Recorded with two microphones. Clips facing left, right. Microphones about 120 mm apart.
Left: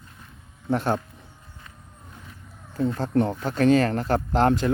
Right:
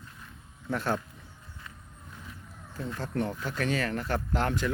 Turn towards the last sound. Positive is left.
turn(degrees=30)  # may be behind; listen again after turning